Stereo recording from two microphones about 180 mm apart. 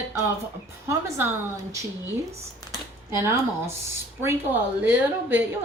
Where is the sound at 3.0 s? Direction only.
15° right (ahead or behind).